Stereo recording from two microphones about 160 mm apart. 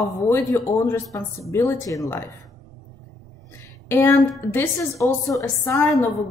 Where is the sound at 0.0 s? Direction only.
20° left (ahead or behind).